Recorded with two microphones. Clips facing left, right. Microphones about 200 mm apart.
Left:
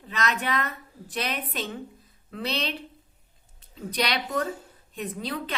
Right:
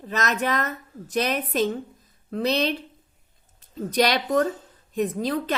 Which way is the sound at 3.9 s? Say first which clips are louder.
Right 7 dB; 45° right (ahead or behind).